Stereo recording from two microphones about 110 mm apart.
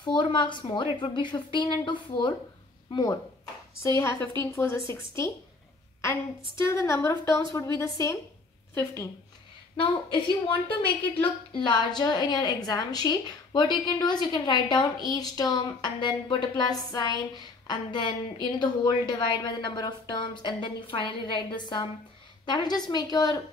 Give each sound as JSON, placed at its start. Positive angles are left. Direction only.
{"t": 0.0, "sound": "a woman's voice", "side_deg": 45}
{"t": 3.8, "sound": "a woman's voice", "side_deg": 25}
{"t": 6.6, "sound": "a woman's voice", "side_deg": 25}
{"t": 10.1, "sound": "a woman's voice", "side_deg": 50}